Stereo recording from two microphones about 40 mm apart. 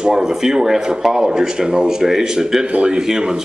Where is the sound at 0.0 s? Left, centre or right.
Centre.